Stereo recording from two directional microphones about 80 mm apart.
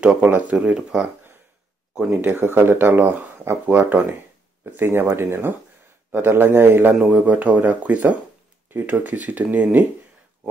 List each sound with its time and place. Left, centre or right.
0.0 s speech: centre
2.2 s speech: right